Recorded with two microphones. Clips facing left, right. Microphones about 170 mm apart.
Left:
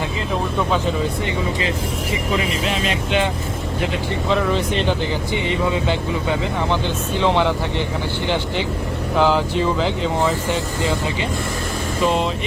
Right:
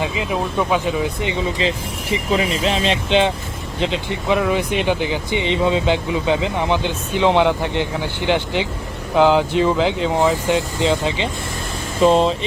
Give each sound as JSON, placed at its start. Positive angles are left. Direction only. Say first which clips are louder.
{"t": 1.2, "sound": "speech", "louder": "right 2 dB", "side_deg": -20}
{"t": 2.3, "sound": "speech", "louder": "right 4 dB", "side_deg": -30}
{"t": 4.4, "sound": "speech", "louder": "right 1 dB", "side_deg": -10}
{"t": 12.0, "sound": "speech", "louder": "right 6 dB", "side_deg": -35}